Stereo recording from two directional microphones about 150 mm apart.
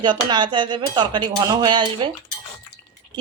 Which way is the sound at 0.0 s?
30° right (ahead or behind).